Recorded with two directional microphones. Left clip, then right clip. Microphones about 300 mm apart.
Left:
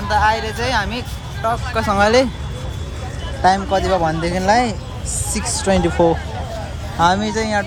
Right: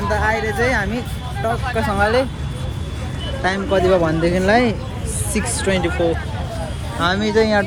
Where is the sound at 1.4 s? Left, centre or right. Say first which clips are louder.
Left 2 dB; centre.